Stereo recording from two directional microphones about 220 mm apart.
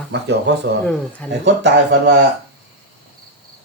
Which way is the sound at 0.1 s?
50° right (ahead or behind).